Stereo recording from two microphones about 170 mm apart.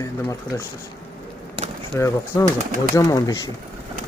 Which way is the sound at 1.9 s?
20° left (ahead or behind).